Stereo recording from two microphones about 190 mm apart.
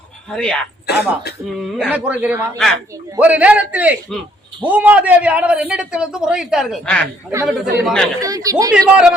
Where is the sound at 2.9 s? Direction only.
10° right (ahead or behind).